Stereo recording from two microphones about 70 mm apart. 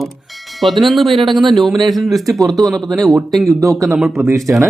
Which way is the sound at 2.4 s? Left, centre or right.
Right.